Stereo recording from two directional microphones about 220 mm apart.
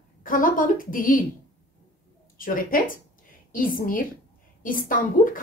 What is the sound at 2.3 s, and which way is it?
A woman's voice, 40° left (ahead or behind).